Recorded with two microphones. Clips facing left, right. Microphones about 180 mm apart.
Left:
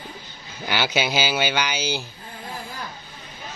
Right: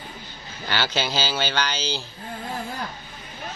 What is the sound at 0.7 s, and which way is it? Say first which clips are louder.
Speech: left 2 dB; 10° left (ahead or behind).